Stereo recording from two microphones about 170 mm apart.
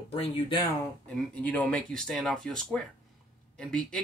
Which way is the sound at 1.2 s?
10° left (ahead or behind).